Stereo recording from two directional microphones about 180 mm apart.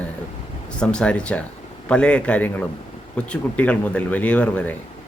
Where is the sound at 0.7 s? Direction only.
5° left (ahead or behind).